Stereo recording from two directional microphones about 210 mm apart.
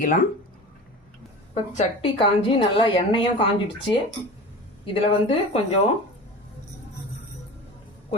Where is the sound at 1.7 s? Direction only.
25° left (ahead or behind).